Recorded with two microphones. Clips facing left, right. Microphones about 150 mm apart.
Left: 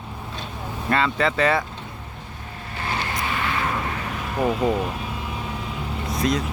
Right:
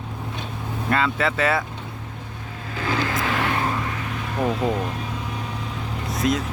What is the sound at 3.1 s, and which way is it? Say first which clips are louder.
Vehicle: right 3 dB; 90° right.